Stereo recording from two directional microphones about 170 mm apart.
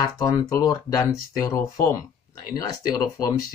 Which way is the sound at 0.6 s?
20° left (ahead or behind).